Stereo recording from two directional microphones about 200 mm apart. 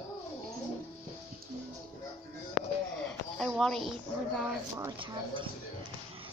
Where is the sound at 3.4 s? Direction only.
Centre (ahead or behind).